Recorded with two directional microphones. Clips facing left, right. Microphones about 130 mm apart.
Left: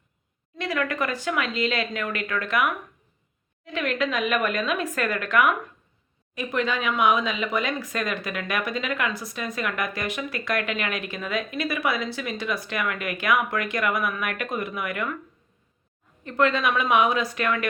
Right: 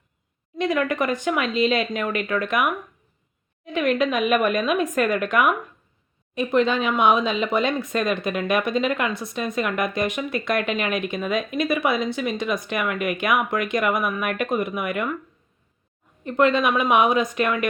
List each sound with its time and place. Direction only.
0.5 s speech: 20° right (ahead or behind)
16.2 s speech: 20° right (ahead or behind)